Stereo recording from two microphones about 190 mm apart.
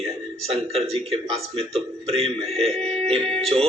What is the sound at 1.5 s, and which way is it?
A man's voice, 30° right (ahead or behind).